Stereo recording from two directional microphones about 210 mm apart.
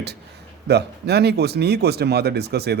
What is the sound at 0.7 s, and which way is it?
Speech, 50° right (ahead or behind).